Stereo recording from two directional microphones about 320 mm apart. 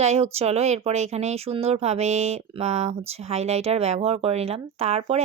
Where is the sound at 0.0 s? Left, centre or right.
Centre.